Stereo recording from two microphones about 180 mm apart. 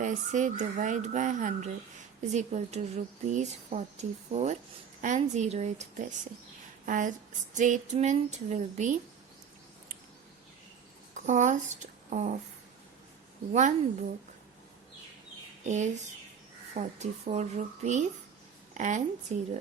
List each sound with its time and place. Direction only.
0.0 s a woman's voice: 45° right (ahead or behind)
11.3 s speech: 40° right (ahead or behind)
13.5 s speech: 40° right (ahead or behind)
15.6 s a woman's voice: 40° right (ahead or behind)